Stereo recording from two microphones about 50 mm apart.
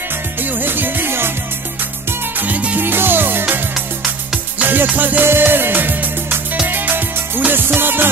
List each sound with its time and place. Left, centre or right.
0.4 s music: right
2.0 s music: right
2.8 s music: right
5.2 s music: right